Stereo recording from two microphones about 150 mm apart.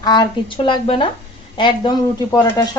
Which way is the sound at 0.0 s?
30° left (ahead or behind).